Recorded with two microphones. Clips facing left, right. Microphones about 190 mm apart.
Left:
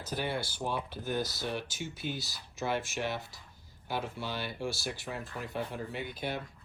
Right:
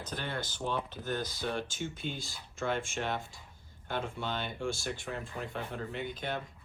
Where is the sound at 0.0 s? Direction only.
10° left (ahead or behind).